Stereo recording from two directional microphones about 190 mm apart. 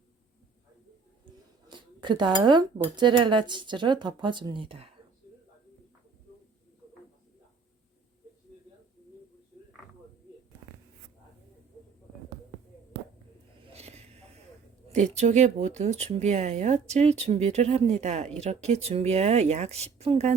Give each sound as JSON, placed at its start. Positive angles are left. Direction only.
{"t": 1.2, "sound": "speech", "side_deg": -25}
{"t": 13.7, "sound": "a sound", "side_deg": -35}
{"t": 14.8, "sound": "speech", "side_deg": -35}